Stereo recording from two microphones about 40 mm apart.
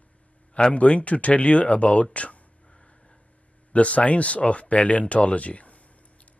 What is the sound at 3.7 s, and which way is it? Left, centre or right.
Speech, left.